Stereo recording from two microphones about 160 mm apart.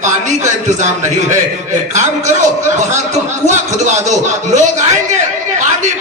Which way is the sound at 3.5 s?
45° right (ahead or behind).